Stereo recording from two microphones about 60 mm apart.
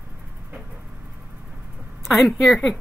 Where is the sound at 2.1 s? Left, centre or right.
Centre.